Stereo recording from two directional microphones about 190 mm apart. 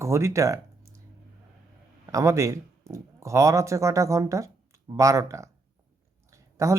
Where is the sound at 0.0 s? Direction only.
15° right (ahead or behind).